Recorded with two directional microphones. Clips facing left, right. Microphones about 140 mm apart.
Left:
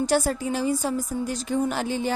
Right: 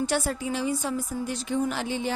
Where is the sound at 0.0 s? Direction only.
40° left (ahead or behind).